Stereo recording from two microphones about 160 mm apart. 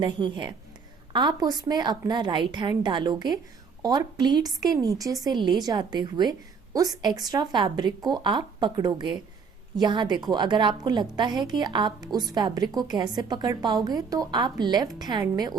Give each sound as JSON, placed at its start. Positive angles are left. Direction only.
{"t": 0.0, "sound": "a woman's voice", "side_deg": -30}